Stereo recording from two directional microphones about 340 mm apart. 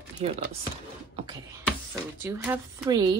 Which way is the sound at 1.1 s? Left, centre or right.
Centre.